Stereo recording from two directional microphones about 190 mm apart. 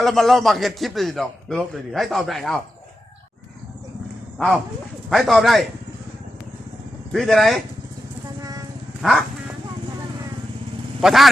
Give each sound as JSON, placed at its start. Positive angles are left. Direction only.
{"t": 0.0, "sound": "a man's voice", "side_deg": 0}
{"t": 4.4, "sound": "a man's voice", "side_deg": 0}
{"t": 7.1, "sound": "a man's voice", "side_deg": 0}
{"t": 8.4, "sound": "a sound", "side_deg": -20}
{"t": 9.0, "sound": "dog", "side_deg": 0}
{"t": 11.0, "sound": "a man's voice", "side_deg": 0}